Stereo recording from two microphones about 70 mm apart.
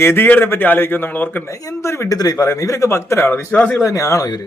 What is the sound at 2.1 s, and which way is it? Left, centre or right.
Speech, left.